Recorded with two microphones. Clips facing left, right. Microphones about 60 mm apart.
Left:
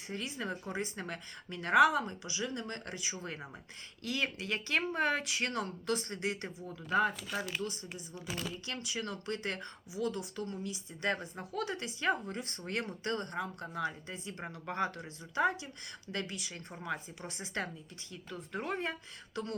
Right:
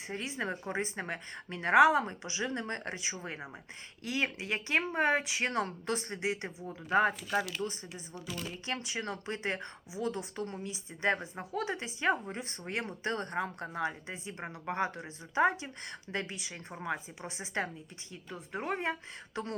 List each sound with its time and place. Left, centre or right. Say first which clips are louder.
0.1 s speech: right 2 dB; right
6.9 s speech: right 3 dB; right